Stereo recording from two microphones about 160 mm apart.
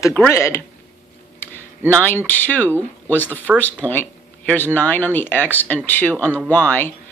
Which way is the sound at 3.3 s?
10° right (ahead or behind).